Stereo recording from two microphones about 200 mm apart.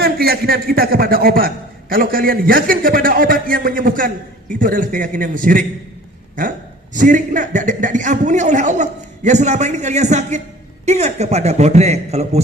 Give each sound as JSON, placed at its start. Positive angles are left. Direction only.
{"t": 0.0, "sound": "a man's voice", "side_deg": -50}
{"t": 6.9, "sound": "a man's voice", "side_deg": -40}